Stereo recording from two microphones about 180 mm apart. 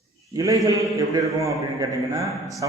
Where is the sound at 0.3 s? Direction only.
20° right (ahead or behind).